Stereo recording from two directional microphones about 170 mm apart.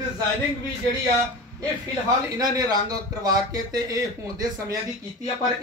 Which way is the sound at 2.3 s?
20° right (ahead or behind).